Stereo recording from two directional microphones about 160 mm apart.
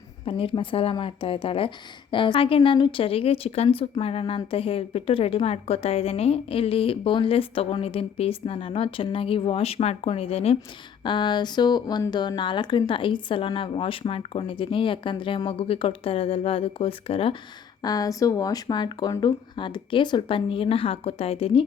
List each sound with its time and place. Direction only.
0.3 s speech: 35° left (ahead or behind)
17.8 s speech: 25° left (ahead or behind)